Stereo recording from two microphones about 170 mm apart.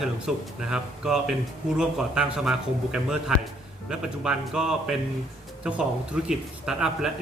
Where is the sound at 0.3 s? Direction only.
Centre (ahead or behind).